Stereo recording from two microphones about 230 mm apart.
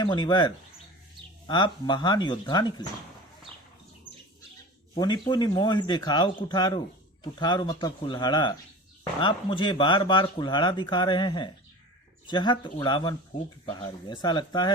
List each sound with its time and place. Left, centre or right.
0.0 s speech: centre
4.9 s speech: centre